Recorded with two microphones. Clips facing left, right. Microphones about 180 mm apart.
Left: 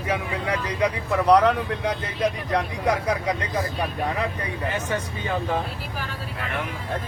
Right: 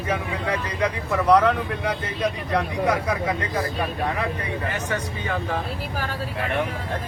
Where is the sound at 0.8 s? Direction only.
20° left (ahead or behind).